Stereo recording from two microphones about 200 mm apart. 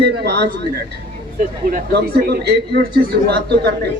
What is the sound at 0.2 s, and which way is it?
Speech, 55° right (ahead or behind).